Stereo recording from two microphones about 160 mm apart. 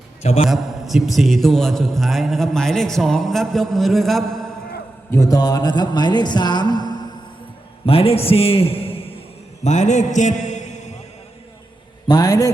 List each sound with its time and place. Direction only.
0.2 s a man's voice: 40° left (ahead or behind)
0.4 s a man's voice: centre (ahead or behind)
5.1 s a sound: 20° left (ahead or behind)
7.9 s a man's voice: 35° left (ahead or behind)
9.6 s a man's voice: 45° left (ahead or behind)
12.0 s a sound: 25° left (ahead or behind)